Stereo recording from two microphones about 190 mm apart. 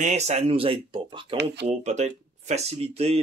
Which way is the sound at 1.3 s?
60° right (ahead or behind).